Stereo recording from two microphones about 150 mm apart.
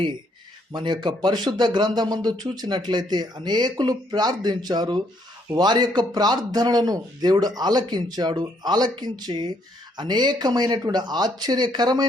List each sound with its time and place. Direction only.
0.7 s speech: 30° right (ahead or behind)